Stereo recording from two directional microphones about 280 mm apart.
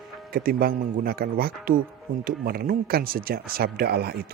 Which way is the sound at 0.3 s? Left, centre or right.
Right.